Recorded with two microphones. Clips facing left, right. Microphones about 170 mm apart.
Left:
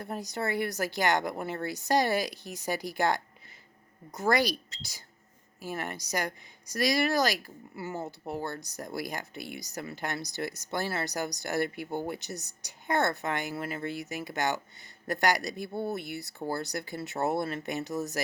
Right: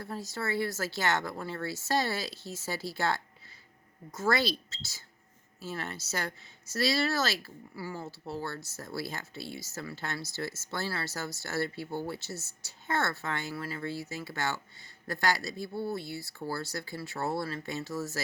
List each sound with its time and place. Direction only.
0.0 s speech: 20° left (ahead or behind)